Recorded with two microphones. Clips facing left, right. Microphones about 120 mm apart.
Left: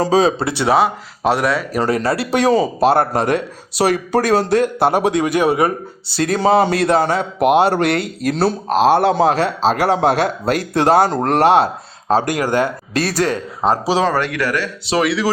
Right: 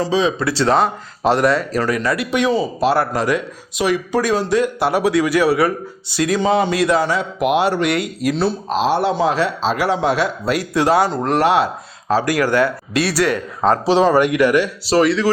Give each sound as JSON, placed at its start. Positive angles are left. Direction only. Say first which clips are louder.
{"t": 0.0, "sound": "speech", "louder": "left 3 dB", "side_deg": 40}
{"t": 0.4, "sound": "speech", "louder": "right 1 dB", "side_deg": 20}
{"t": 0.7, "sound": "speech", "louder": "left 4 dB", "side_deg": 5}
{"t": 1.8, "sound": "speech", "louder": "left 2 dB", "side_deg": 30}
{"t": 3.8, "sound": "speech", "louder": "left 2 dB", "side_deg": 35}
{"t": 4.1, "sound": "a man's voice", "louder": "left 2 dB", "side_deg": 55}
{"t": 5.0, "sound": "speech", "louder": "even", "side_deg": 25}
{"t": 6.1, "sound": "speech", "louder": "left 2 dB", "side_deg": 40}
{"t": 6.9, "sound": "a man's voice", "louder": "left 2 dB", "side_deg": 55}
{"t": 12.1, "sound": "speech", "louder": "even", "side_deg": 20}
{"t": 12.9, "sound": "a man's voice", "louder": "right 1 dB", "side_deg": 45}
{"t": 13.6, "sound": "speech", "louder": "right 1 dB", "side_deg": 15}
{"t": 14.1, "sound": "speech", "louder": "right 5 dB", "side_deg": -15}
{"t": 14.8, "sound": "speech", "louder": "right 1 dB", "side_deg": 0}